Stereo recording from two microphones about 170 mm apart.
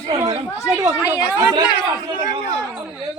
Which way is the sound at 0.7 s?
15° right (ahead or behind).